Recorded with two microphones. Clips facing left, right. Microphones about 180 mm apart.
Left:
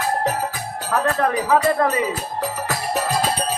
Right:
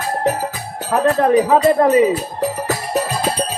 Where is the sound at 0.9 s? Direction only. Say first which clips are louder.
Right 7 dB; 30° right (ahead or behind).